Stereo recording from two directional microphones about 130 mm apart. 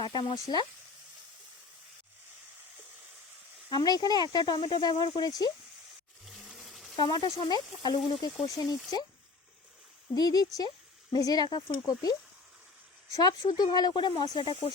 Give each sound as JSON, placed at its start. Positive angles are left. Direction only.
{"t": 0.0, "sound": "speech", "side_deg": 35}
{"t": 3.7, "sound": "speech", "side_deg": 35}
{"t": 6.2, "sound": "engine", "side_deg": 0}
{"t": 6.9, "sound": "speech", "side_deg": 35}
{"t": 10.2, "sound": "speech", "side_deg": 30}